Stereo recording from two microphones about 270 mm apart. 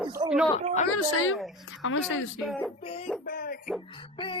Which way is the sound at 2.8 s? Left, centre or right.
Left.